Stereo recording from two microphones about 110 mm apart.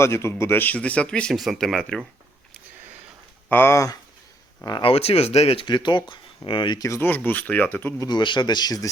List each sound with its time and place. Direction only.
0.0 s speech: 25° left (ahead or behind); by 2.0 s 5° left (ahead or behind)
3.5 s speech: 20° left (ahead or behind)
4.8 s speech: 60° left (ahead or behind)
5.6 s speech: 45° left (ahead or behind)
6.8 s speech: 25° left (ahead or behind)
8.0 s speech: 45° left (ahead or behind)